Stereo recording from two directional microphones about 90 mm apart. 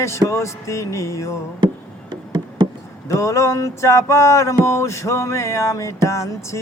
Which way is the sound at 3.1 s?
35° left (ahead or behind).